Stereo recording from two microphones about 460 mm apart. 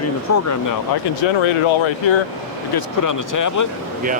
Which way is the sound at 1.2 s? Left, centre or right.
Left.